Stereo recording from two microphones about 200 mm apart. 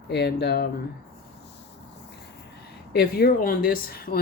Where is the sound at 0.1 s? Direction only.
55° left (ahead or behind).